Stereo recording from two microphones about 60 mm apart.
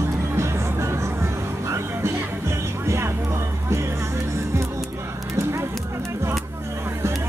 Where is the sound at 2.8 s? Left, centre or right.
Right.